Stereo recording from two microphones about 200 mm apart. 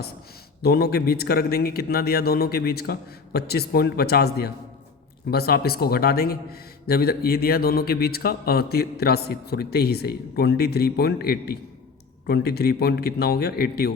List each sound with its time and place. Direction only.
0.6 s a man's voice: 50° left (ahead or behind)